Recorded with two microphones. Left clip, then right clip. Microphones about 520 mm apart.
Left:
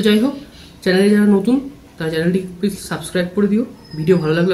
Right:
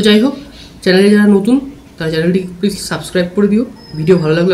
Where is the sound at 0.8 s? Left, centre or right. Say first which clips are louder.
Right 5 dB; left.